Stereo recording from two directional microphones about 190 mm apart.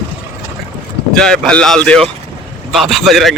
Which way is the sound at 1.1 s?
5° left (ahead or behind).